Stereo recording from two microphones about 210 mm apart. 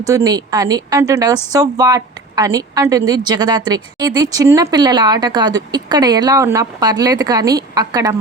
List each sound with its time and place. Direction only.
0.0 s a woman's voice: 15° right (ahead or behind)